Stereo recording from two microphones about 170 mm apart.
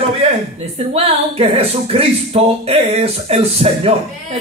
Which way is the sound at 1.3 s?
35° right (ahead or behind).